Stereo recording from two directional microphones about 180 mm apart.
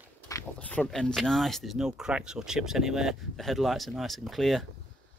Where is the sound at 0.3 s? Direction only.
10° left (ahead or behind).